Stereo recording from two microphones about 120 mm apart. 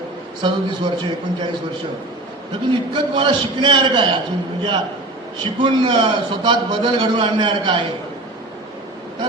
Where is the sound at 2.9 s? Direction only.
40° right (ahead or behind).